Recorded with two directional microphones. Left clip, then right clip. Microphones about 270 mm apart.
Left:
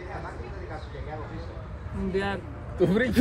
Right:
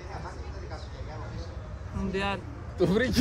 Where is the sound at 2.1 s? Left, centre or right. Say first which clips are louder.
Left 2 dB; centre.